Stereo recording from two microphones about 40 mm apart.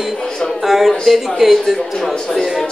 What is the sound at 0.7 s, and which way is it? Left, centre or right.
A man's voice, centre.